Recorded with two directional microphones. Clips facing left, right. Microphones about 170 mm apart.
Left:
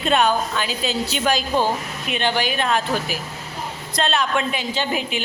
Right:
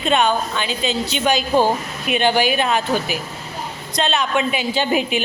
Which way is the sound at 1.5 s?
15° right (ahead or behind).